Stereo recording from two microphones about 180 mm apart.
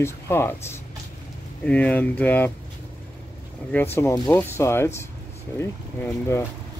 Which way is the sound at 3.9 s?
15° left (ahead or behind).